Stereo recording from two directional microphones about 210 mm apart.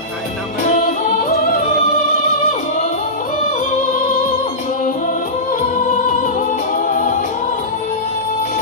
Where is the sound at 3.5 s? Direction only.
40° left (ahead or behind).